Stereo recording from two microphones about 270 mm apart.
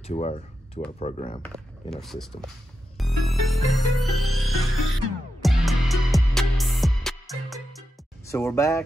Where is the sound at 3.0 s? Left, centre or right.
Centre.